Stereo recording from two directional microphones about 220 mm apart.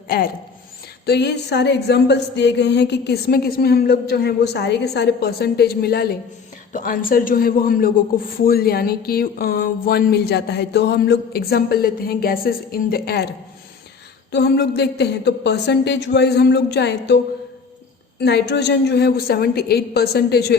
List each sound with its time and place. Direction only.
1.0 s a woman's voice: 50° left (ahead or behind)
14.3 s a woman's voice: 50° left (ahead or behind)
18.2 s a woman's voice: 50° left (ahead or behind)